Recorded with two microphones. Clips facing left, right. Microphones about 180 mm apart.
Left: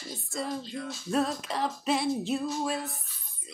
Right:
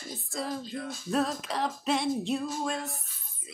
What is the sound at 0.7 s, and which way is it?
Music, 50° right (ahead or behind).